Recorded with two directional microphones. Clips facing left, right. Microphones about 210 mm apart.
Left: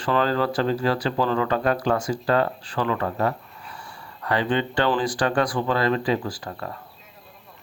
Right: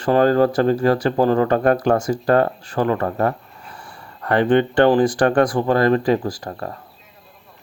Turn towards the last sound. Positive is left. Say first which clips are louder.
# right 4 dB
turn(degrees=-40)  # may be behind; listen again after turning